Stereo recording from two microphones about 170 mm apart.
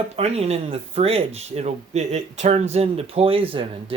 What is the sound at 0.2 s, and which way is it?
Speech, 40° right (ahead or behind).